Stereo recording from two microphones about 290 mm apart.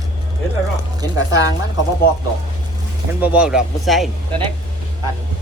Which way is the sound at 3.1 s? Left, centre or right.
Centre.